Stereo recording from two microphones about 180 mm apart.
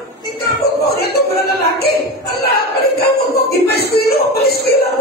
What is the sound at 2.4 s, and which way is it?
Music, 60° left (ahead or behind).